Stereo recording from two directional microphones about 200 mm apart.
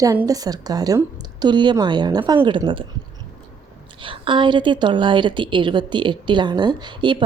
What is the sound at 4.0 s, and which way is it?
A woman's voice, 25° right (ahead or behind).